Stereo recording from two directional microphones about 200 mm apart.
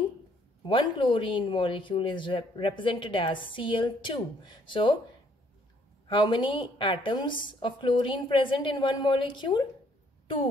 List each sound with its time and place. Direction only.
0.7 s speech: 25° left (ahead or behind)
6.0 s speech: 25° left (ahead or behind)